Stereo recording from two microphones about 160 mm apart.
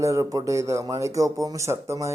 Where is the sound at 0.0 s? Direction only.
20° right (ahead or behind).